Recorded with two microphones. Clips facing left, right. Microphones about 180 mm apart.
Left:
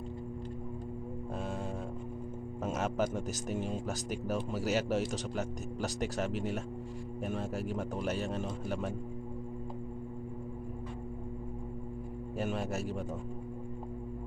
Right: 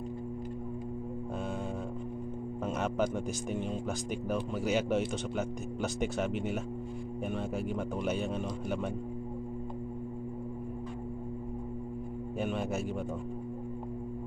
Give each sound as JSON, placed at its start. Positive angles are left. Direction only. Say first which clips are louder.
{"t": 2.6, "sound": "speech", "louder": "right 1 dB", "side_deg": 0}
{"t": 12.4, "sound": "speech", "louder": "right 1 dB", "side_deg": 0}